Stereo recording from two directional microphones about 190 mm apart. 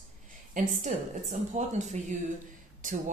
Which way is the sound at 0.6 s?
40° right (ahead or behind).